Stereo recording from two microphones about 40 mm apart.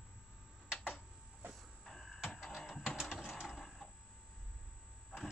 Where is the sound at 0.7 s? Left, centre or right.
Right.